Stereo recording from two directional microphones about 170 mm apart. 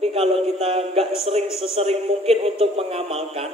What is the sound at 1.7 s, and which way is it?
Speech, 35° right (ahead or behind).